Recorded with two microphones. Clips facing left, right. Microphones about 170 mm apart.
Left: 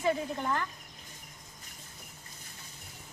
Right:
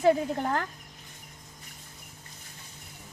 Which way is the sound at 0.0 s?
50° right (ahead or behind).